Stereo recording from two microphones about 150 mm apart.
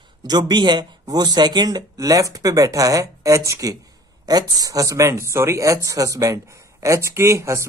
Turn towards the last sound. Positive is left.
turn(degrees=-20)  # may be behind; listen again after turning